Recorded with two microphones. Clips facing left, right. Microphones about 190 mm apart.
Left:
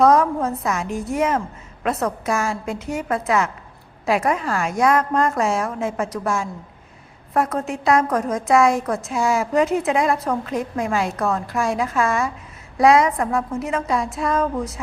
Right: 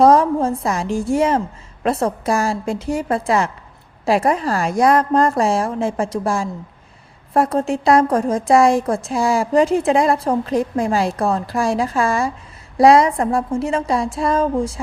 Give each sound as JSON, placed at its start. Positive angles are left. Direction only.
{"t": 0.0, "sound": "a woman's voice", "side_deg": -30}